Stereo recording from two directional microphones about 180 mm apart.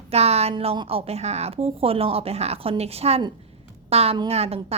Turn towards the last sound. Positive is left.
turn(degrees=-35)  # may be behind; listen again after turning